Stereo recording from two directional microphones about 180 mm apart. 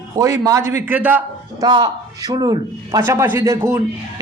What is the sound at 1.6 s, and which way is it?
A man's voice, 25° right (ahead or behind).